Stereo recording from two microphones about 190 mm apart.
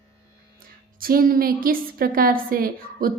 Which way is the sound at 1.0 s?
50° right (ahead or behind).